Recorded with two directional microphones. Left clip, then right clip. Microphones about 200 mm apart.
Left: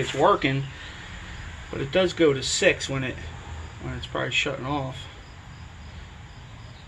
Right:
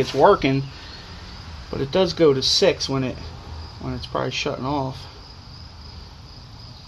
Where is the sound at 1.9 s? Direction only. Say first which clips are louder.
Right 3 dB; 60° right (ahead or behind).